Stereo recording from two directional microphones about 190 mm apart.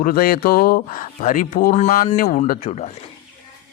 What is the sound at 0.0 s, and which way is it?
A man's voice, 50° left (ahead or behind).